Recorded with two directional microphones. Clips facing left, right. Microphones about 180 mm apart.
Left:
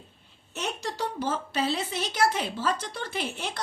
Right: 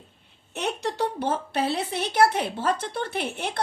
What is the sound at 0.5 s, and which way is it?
Speech, 65° right (ahead or behind).